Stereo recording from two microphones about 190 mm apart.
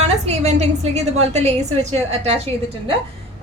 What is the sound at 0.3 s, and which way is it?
A woman's voice, 35° right (ahead or behind).